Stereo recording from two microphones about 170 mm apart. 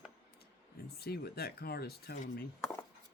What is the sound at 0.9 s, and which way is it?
Speech, 65° left (ahead or behind).